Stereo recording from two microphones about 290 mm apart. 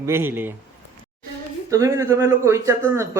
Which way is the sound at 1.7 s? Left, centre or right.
Centre.